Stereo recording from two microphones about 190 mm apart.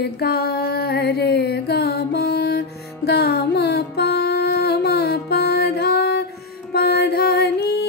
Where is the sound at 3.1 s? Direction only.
55° left (ahead or behind).